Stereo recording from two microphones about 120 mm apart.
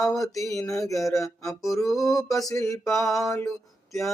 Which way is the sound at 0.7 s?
25° left (ahead or behind).